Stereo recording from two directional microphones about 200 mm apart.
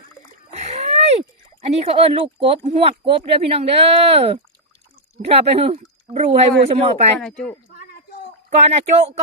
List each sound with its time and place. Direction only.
0.5 s rowboat: 35° right (ahead or behind)
1.6 s speech: 30° right (ahead or behind)
7.2 s speech: 5° left (ahead or behind)
8.4 s speech: 35° right (ahead or behind)